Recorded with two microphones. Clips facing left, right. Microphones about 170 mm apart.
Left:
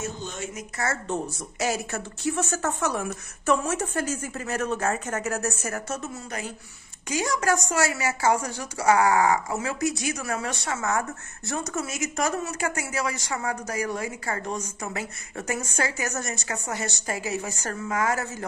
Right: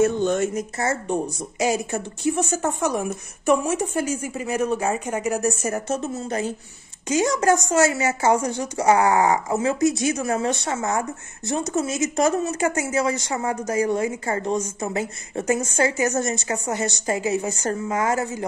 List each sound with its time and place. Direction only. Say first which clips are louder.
0.0 s speech: right 14 dB; 60° right (ahead or behind)
0.8 s a woman's voice: right 3 dB; 15° right (ahead or behind)